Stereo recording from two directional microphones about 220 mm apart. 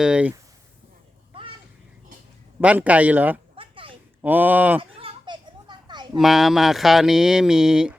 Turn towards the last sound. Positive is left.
turn(degrees=-5)  # may be behind; listen again after turning